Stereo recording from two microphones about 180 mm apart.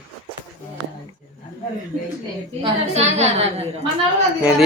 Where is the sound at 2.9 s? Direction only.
35° right (ahead or behind).